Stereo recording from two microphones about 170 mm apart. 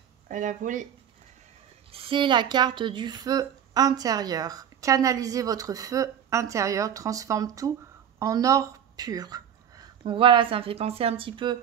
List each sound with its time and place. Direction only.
0.3 s speech: 50° right (ahead or behind)
1.9 s speech: 35° right (ahead or behind)